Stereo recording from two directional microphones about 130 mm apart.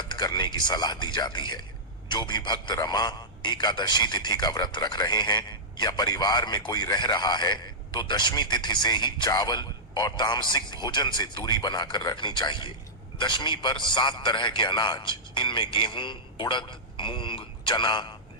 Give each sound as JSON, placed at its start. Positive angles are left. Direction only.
{"t": 0.0, "sound": "a man's voice", "side_deg": 35}